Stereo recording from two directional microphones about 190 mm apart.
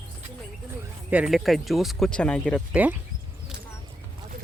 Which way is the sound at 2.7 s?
10° right (ahead or behind).